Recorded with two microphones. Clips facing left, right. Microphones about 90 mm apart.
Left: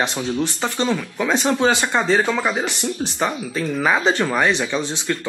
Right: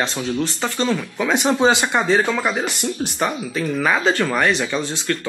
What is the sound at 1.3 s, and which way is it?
Speech, 20° right (ahead or behind).